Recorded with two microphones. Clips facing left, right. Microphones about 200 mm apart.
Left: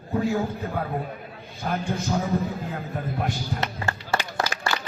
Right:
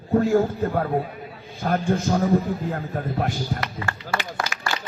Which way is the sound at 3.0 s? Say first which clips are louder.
Right 2 dB; 55° right (ahead or behind).